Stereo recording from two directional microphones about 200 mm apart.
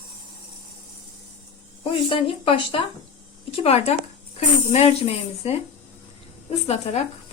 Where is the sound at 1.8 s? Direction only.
25° left (ahead or behind).